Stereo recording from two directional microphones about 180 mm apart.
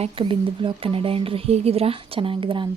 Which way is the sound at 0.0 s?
30° right (ahead or behind).